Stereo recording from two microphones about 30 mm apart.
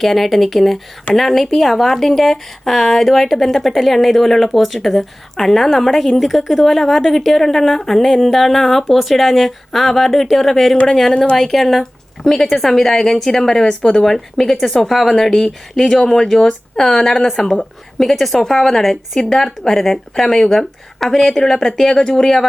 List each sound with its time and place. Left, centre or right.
0.0 s a woman's voice: centre; by 14.0 s left
14.0 s a woman's voice: centre
14.5 s a woman's voice: centre
16.3 s a woman's voice: centre
16.7 s a woman's voice: centre
17.2 s a woman's voice: centre